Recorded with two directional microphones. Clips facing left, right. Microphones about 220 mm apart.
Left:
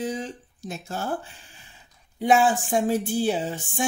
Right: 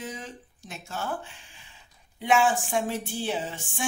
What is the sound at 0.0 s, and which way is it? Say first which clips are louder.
Speech: left 8 dB; 35° left (ahead or behind).